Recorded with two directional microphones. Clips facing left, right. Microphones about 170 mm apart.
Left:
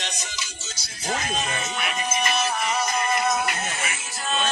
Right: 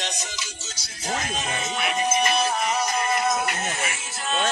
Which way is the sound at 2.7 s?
15° right (ahead or behind).